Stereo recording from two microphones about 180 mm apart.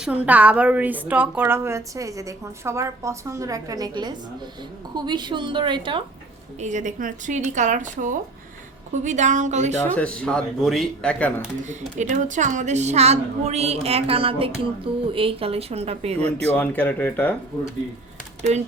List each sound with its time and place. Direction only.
0.0 s a woman's voice: 10° right (ahead or behind); by 6.0 s 25° right (ahead or behind)
6.6 s a woman's voice: 45° right (ahead or behind)
9.9 s speech: 5° left (ahead or behind)
11.7 s a woman's voice: 45° right (ahead or behind)
16.6 s speech: 10° left (ahead or behind)